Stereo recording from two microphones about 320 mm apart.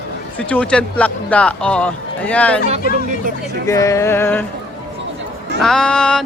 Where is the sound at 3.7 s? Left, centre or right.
Centre.